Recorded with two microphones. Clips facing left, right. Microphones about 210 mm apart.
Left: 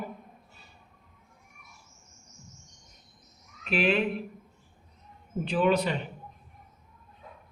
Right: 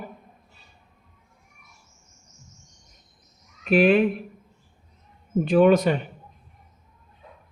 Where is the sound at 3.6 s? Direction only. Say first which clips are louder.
Right 8 dB; 45° right (ahead or behind).